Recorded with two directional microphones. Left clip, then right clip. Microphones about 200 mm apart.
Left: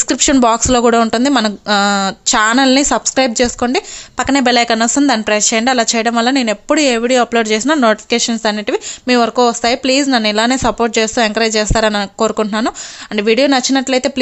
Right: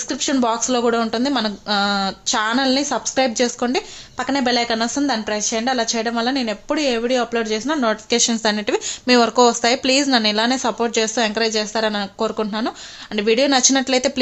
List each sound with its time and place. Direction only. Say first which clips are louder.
0.1 s speech: left 8 dB; 40° left (ahead or behind)